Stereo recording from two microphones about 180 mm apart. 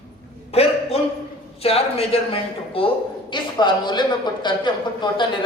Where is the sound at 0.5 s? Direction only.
35° left (ahead or behind).